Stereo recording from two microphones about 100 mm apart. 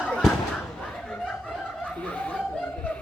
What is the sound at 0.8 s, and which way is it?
Snicker, 10° left (ahead or behind).